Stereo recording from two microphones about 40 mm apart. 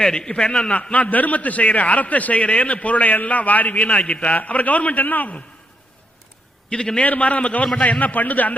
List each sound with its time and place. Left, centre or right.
0.0 s a man's voice: centre
0.8 s a man's voice: left
6.7 s a man's voice: left
7.0 s a man's voice: left